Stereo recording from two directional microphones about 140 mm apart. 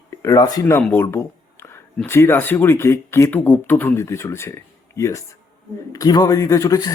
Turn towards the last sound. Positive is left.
turn(degrees=25)  # may be behind; listen again after turning